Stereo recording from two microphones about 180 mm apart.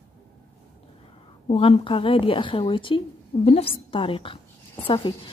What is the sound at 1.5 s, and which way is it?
A woman's voice, 30° left (ahead or behind).